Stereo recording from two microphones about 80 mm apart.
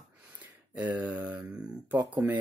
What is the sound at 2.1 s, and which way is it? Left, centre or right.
Speech, right.